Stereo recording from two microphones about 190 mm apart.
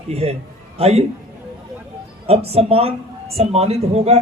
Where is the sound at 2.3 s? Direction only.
35° right (ahead or behind).